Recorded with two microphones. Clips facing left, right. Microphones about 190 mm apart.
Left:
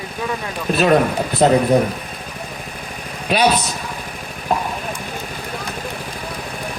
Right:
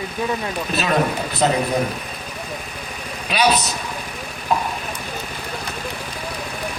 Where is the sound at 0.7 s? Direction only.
55° left (ahead or behind).